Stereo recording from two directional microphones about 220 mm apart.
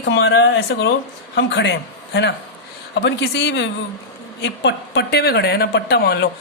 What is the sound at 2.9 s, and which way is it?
Speech, 50° left (ahead or behind).